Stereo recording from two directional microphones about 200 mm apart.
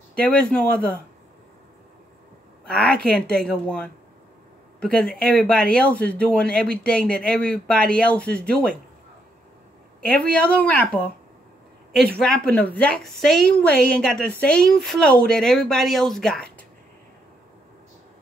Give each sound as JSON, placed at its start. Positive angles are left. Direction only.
{"t": 0.1, "sound": "a woman's voice", "side_deg": 5}
{"t": 2.7, "sound": "a woman's voice", "side_deg": 5}
{"t": 10.0, "sound": "speech", "side_deg": 5}
{"t": 11.9, "sound": "a woman's voice", "side_deg": 0}